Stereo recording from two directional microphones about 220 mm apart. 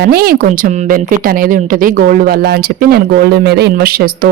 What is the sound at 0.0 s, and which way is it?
A woman's voice, 45° right (ahead or behind).